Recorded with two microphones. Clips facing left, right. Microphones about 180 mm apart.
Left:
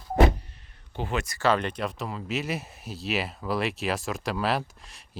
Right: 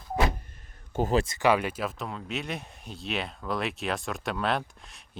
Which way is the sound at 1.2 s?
25° right (ahead or behind).